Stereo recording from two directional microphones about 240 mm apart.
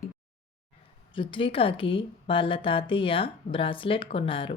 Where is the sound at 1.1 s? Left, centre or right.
Left.